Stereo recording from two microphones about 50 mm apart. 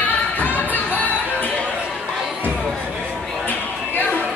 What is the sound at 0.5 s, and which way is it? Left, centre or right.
Music, right.